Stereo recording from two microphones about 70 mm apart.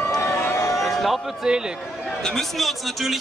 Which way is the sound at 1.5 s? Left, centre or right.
Centre.